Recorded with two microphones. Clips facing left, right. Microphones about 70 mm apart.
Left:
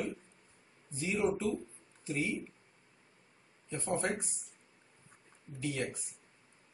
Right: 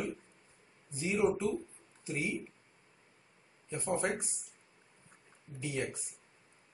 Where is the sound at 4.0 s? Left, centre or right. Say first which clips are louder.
Right 1 dB; centre.